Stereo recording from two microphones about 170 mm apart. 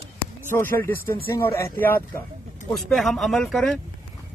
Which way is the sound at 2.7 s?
Centre (ahead or behind).